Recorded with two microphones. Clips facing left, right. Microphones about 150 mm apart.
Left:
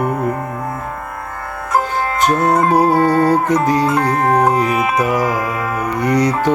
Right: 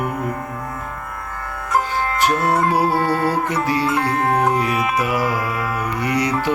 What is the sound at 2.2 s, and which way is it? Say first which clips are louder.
Music: left 4 dB; 45° left (ahead or behind).